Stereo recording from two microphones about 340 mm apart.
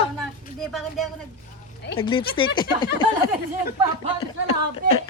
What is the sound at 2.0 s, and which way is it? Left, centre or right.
Speech, centre.